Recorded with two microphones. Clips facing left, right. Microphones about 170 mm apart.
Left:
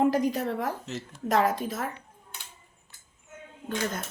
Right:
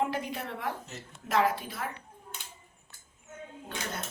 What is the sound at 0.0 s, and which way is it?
A woman's voice, 40° left (ahead or behind).